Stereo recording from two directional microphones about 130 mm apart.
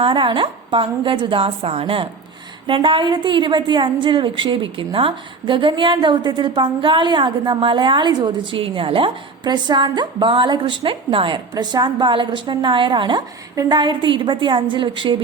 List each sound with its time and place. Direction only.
0.0 s a woman's voice: 40° right (ahead or behind)
11.5 s a woman's voice: 30° right (ahead or behind)